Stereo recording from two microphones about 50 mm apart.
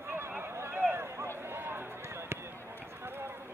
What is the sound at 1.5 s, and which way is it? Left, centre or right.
Run, right.